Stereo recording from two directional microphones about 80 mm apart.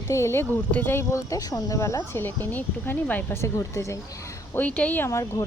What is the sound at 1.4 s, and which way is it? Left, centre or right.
Speech, left.